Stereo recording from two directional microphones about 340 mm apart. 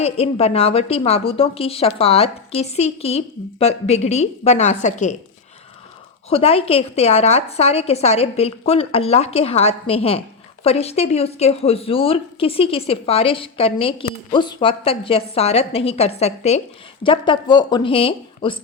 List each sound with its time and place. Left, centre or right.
0.0 s a woman's voice: centre
6.3 s a woman's voice: centre